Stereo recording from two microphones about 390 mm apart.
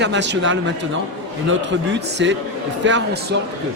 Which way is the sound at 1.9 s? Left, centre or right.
Right.